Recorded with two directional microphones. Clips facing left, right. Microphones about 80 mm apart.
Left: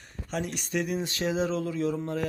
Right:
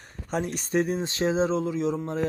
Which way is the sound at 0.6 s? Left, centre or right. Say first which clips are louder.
Right 5 dB; right.